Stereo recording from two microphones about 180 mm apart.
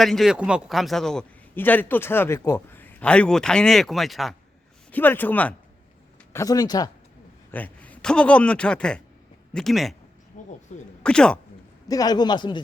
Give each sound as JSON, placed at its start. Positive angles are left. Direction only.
{"t": 0.0, "sound": "a man's voice", "side_deg": 0}
{"t": 6.3, "sound": "a man's voice", "side_deg": 20}
{"t": 7.5, "sound": "a man's voice", "side_deg": 10}
{"t": 10.3, "sound": "speech", "side_deg": 45}
{"t": 11.0, "sound": "a man's voice", "side_deg": 5}
{"t": 11.9, "sound": "a man's voice", "side_deg": 20}